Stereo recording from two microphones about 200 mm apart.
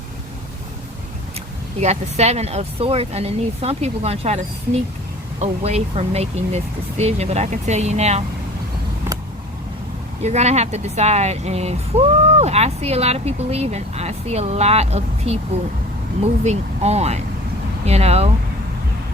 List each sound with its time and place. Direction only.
1.8 s speech: 35° right (ahead or behind)
9.1 s vehicle: 10° right (ahead or behind)
10.2 s speech: 35° right (ahead or behind)
16.4 s speech: 35° right (ahead or behind)